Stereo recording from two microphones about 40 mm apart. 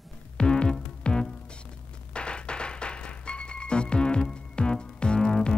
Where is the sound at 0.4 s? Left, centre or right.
Left.